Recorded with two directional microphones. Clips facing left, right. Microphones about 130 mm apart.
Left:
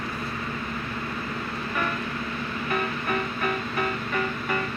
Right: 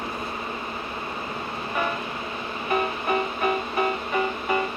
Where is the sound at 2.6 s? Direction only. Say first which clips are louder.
Right 4 dB; 25° right (ahead or behind).